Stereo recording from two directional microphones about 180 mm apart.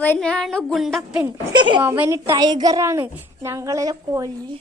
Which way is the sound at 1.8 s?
10° right (ahead or behind).